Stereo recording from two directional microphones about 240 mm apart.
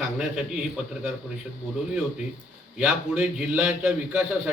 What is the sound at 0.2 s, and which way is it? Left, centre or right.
Speech, centre.